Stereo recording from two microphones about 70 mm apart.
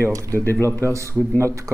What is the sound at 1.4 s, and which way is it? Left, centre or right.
Speech, right.